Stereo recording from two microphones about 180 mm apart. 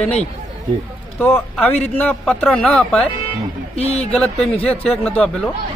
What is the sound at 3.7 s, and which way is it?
Speech, 35° left (ahead or behind).